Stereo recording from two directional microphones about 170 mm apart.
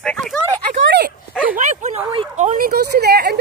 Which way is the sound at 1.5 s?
45° right (ahead or behind).